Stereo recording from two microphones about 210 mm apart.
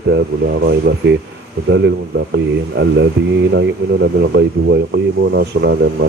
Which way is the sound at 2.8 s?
55° right (ahead or behind).